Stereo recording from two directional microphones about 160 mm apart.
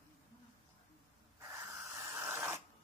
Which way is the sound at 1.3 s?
15° right (ahead or behind).